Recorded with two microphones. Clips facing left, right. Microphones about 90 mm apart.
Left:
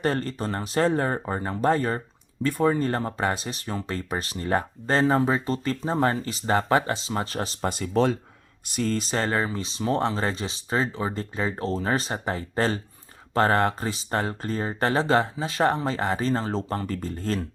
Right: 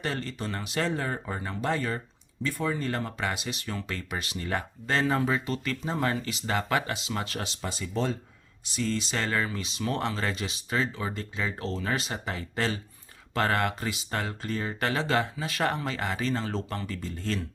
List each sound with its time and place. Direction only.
0.0 s speech: 45° left (ahead or behind)
7.7 s speech: 60° left (ahead or behind)
8.6 s speech: 50° left (ahead or behind)